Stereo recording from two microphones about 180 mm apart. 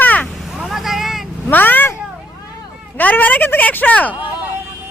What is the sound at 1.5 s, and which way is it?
Speech, 10° left (ahead or behind).